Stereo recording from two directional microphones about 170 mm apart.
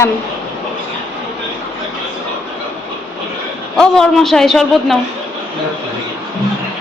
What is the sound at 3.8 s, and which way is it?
A man's voice, centre (ahead or behind).